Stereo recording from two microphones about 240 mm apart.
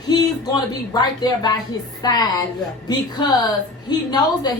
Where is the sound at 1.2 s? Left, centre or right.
Centre.